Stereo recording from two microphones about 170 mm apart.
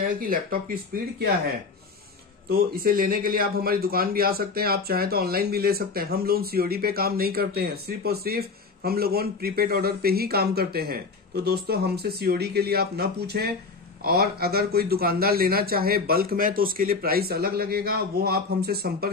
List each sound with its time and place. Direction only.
0.2 s a man's voice: 60° right (ahead or behind)
2.5 s a man's voice: 60° right (ahead or behind)